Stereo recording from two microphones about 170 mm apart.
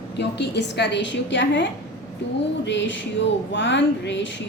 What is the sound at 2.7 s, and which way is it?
A woman's voice, 90° left.